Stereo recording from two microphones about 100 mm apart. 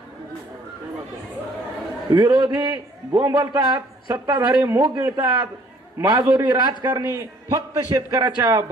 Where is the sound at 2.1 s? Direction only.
45° right (ahead or behind).